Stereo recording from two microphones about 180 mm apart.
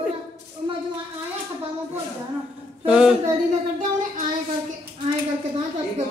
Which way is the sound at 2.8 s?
5° right (ahead or behind).